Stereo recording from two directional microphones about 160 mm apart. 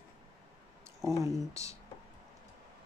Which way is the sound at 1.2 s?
20° right (ahead or behind).